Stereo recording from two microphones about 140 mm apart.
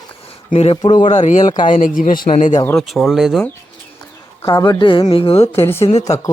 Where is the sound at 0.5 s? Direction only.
45° left (ahead or behind).